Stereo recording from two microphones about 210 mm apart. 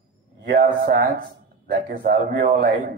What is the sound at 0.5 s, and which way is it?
A man's voice, 40° right (ahead or behind).